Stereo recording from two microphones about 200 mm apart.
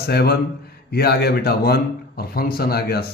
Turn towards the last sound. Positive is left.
turn(degrees=50)  # may be behind; listen again after turning